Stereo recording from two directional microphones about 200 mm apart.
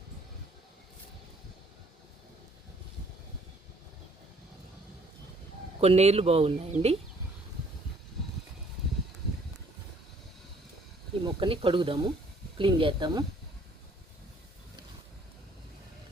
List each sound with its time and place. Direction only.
5.8 s speech: 30° right (ahead or behind)
11.3 s speech: 25° right (ahead or behind)